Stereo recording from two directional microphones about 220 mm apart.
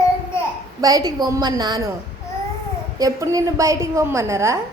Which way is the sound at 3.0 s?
15° right (ahead or behind).